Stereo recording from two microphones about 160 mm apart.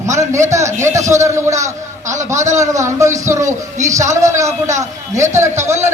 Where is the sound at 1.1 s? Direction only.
20° right (ahead or behind).